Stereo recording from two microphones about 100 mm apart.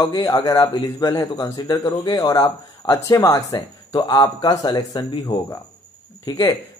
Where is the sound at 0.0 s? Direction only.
35° left (ahead or behind).